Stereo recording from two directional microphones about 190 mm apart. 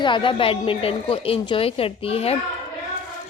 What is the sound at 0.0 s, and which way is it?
A woman's voice, 25° left (ahead or behind).